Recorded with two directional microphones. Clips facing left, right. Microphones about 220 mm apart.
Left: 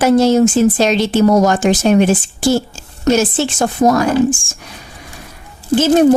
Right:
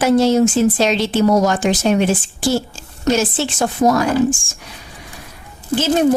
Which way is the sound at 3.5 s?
45° left (ahead or behind).